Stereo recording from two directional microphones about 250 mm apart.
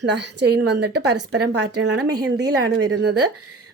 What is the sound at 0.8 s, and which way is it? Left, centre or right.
Speech, right.